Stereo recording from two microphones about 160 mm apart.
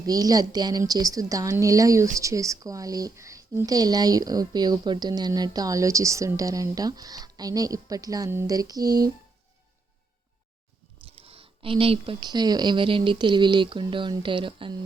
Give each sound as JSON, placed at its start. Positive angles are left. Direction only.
{"t": 0.0, "sound": "a woman's voice", "side_deg": -25}
{"t": 11.1, "sound": "speech", "side_deg": -35}